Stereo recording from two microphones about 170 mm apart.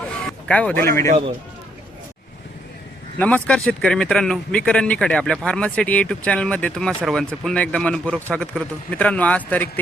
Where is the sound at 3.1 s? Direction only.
10° left (ahead or behind).